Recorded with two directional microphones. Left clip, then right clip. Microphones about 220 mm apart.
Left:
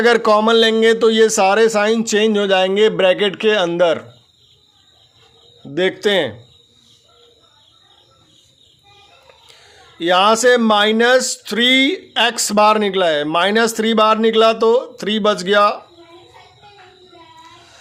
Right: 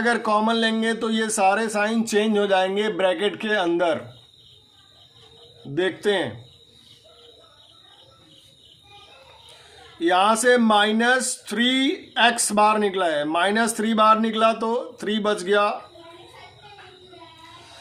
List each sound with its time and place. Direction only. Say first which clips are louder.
0.0 s speech: left 8 dB; 40° left (ahead or behind)
5.7 s speech: left 6 dB; 45° left (ahead or behind)
10.0 s speech: left 6 dB; 45° left (ahead or behind)